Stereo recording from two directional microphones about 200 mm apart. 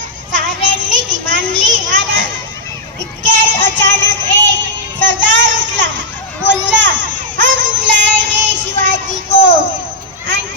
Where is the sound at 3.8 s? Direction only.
65° right (ahead or behind).